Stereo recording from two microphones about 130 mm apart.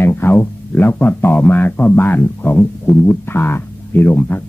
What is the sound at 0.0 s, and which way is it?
Speech, 15° left (ahead or behind).